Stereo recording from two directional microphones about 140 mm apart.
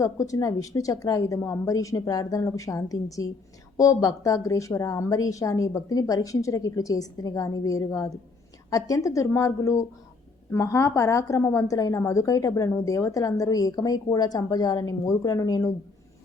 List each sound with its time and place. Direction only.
0.0 s a woman's voice: 25° left (ahead or behind)